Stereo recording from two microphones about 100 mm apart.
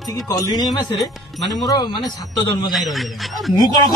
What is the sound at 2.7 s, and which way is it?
Speech, centre (ahead or behind).